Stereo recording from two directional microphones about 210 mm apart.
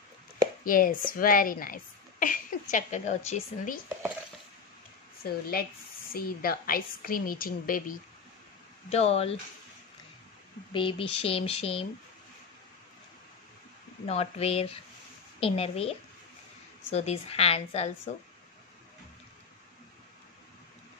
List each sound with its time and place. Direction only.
0.7 s a woman's voice: 40° left (ahead or behind)
5.2 s a woman's voice: 45° left (ahead or behind)
8.9 s speech: 30° left (ahead or behind)
10.7 s speech: 25° left (ahead or behind)
14.0 s speech: 30° left (ahead or behind)